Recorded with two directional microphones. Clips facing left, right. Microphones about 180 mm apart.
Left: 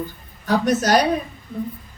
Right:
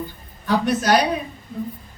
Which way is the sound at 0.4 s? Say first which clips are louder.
Left 1 dB; 45° left (ahead or behind).